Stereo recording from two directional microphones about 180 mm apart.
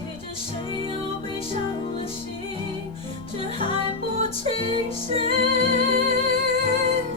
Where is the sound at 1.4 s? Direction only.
30° left (ahead or behind).